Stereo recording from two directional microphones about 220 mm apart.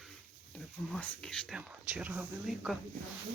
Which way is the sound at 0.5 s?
5° left (ahead or behind).